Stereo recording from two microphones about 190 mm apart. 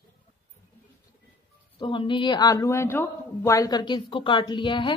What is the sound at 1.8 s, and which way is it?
Speech, 25° left (ahead or behind).